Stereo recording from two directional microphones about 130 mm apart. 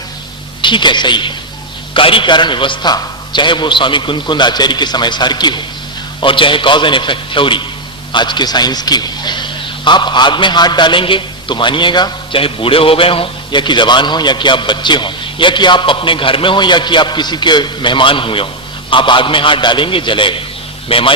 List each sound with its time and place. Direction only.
0.6 s a man's voice: 35° left (ahead or behind)